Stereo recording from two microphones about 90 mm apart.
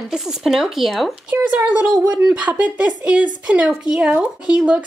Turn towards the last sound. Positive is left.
turn(degrees=-10)  # may be behind; listen again after turning